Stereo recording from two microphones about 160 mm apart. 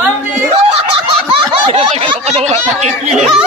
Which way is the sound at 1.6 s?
40° right (ahead or behind).